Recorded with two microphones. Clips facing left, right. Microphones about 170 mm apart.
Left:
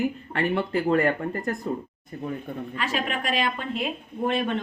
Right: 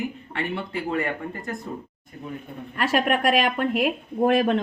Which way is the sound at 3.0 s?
65° right (ahead or behind).